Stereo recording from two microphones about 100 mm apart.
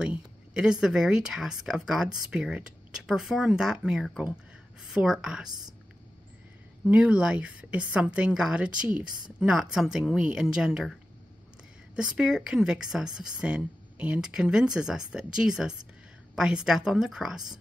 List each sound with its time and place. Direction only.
0.0 s speech: 10° right (ahead or behind)
5.5 s a woman's voice: 45° right (ahead or behind)
6.9 s a woman's voice: 10° right (ahead or behind)